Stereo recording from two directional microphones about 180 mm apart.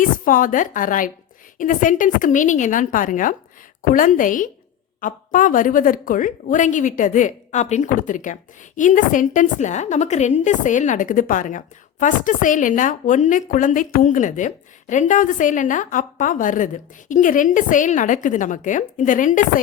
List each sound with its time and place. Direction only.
0.0 s a woman's voice: 50° left (ahead or behind)